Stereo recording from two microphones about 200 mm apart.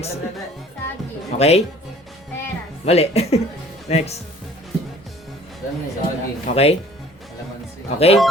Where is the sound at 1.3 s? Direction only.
30° left (ahead or behind).